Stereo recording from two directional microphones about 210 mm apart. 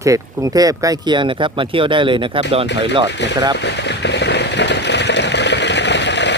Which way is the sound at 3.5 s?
55° left (ahead or behind).